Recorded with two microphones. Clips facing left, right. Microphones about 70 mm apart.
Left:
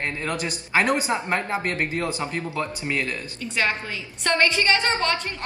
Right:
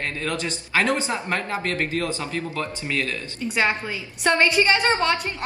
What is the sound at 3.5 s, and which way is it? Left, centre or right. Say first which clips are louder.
A woman's voice: right 2 dB; centre.